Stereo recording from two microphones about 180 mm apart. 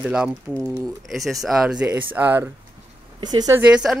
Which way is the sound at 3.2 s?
20° right (ahead or behind).